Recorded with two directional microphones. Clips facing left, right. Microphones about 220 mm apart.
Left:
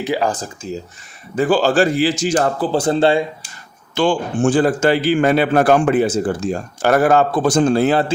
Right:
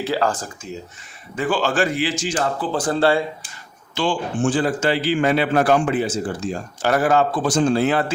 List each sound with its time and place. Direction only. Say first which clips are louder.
0.0 s speech: left 2 dB; 15° left (ahead or behind)
1.4 s speech: left 6 dB; 35° left (ahead or behind)
2.7 s speech: left 3 dB; 25° left (ahead or behind)
3.9 s a man's voice: left 5 dB; 45° left (ahead or behind)